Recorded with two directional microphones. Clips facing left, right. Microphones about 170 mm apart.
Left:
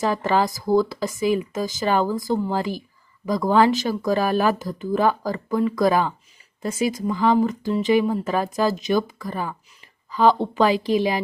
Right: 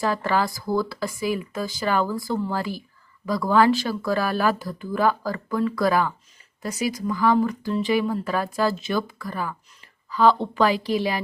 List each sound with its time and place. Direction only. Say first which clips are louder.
0.0 s speech: left 2 dB; 20° left (ahead or behind)